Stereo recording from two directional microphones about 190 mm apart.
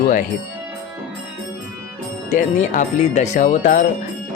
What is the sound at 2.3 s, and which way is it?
Speech, 40° left (ahead or behind).